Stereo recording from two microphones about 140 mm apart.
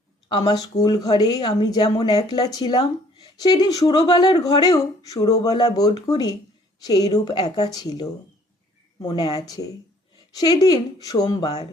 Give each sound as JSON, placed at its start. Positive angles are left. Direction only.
{"t": 0.3, "sound": "speech", "side_deg": 30}